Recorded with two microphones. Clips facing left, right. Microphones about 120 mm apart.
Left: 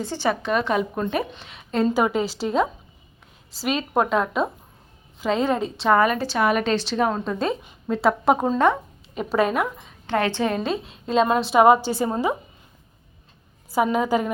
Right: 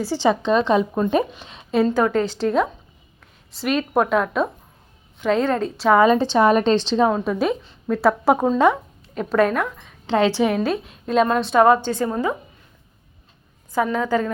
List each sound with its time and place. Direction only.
0.0 s a woman's voice: 15° right (ahead or behind)
1.9 s a woman's voice: 5° left (ahead or behind)
6.0 s a woman's voice: 20° right (ahead or behind)
6.9 s a woman's voice: 15° right (ahead or behind)
9.1 s a woman's voice: 5° left (ahead or behind)
10.1 s a woman's voice: 15° right (ahead or behind); by 12.4 s 15° left (ahead or behind)
13.7 s a woman's voice: 10° left (ahead or behind)